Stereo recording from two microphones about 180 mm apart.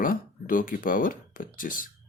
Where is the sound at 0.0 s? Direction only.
50° left (ahead or behind).